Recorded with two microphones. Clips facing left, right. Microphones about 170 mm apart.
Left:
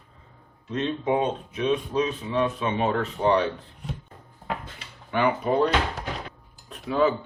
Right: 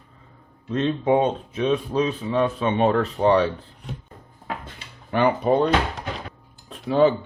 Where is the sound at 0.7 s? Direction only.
35° right (ahead or behind).